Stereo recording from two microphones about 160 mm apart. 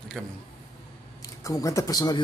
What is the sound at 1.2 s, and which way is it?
Speech, 20° left (ahead or behind).